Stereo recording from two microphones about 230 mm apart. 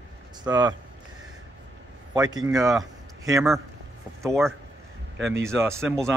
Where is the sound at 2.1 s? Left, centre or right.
Centre.